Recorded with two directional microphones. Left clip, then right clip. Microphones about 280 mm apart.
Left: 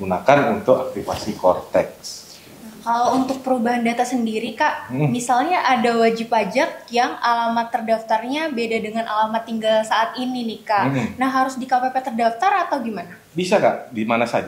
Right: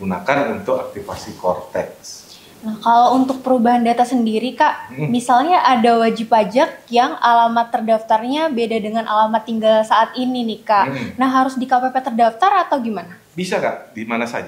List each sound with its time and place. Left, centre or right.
0.3 s speech: left
2.8 s a woman's voice: right
13.4 s speech: left